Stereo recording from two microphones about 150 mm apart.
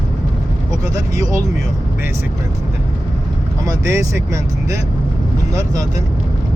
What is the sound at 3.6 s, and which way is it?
Speech, 20° right (ahead or behind).